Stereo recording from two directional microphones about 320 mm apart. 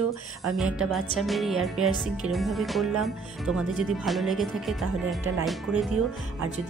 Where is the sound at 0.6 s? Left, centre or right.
Centre.